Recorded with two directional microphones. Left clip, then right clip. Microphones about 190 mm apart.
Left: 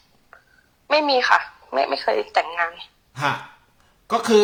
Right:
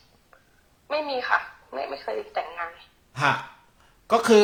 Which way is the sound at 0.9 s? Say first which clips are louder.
Left 8 dB; 40° left (ahead or behind).